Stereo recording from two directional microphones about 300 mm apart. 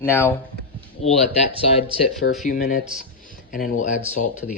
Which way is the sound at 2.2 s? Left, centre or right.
Left.